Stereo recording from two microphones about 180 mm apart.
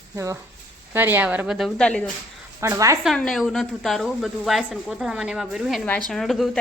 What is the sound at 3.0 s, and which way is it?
A woman's voice, centre (ahead or behind).